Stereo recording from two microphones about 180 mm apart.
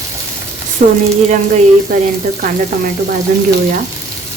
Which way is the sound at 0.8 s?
50° right (ahead or behind).